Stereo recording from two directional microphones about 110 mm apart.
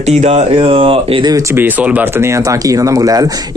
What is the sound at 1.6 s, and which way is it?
Speech, 15° right (ahead or behind).